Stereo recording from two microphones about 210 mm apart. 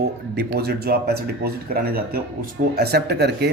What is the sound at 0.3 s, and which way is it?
Speech, 50° right (ahead or behind).